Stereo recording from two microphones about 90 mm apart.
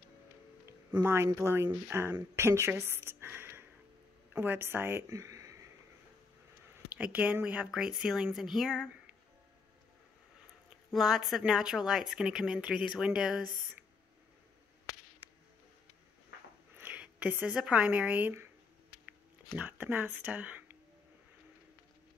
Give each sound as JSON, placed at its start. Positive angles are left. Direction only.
{"t": 0.7, "sound": "speech", "side_deg": -25}
{"t": 5.1, "sound": "a sound", "side_deg": -35}
{"t": 7.0, "sound": "speech", "side_deg": -15}
{"t": 7.7, "sound": "speech", "side_deg": -5}
{"t": 10.9, "sound": "speech", "side_deg": 0}
{"t": 16.7, "sound": "speech", "side_deg": -20}
{"t": 19.5, "sound": "speech", "side_deg": -20}